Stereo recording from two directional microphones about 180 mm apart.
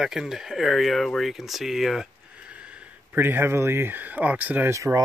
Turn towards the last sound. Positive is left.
turn(degrees=-15)  # may be behind; listen again after turning